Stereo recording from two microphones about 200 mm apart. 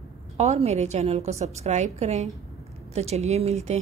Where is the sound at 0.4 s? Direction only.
30° right (ahead or behind).